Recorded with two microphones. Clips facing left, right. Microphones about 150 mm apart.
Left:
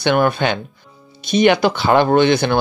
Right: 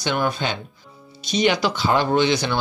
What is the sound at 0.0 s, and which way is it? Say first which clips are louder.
Speech: left 7 dB; 60° left (ahead or behind).